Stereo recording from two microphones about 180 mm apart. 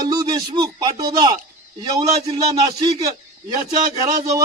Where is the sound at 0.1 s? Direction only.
20° right (ahead or behind).